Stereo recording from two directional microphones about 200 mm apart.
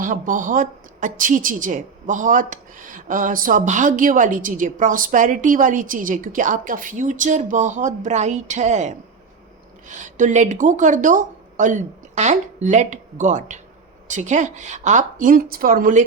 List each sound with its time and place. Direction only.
0.0 s a woman's voice: 40° right (ahead or behind)